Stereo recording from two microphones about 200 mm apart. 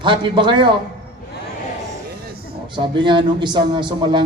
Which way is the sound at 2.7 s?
25° right (ahead or behind).